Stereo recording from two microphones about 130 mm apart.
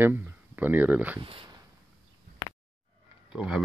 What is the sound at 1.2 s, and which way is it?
Speech, 40° right (ahead or behind).